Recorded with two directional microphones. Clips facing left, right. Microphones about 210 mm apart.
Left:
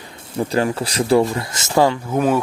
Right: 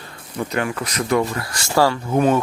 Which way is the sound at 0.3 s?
30° left (ahead or behind).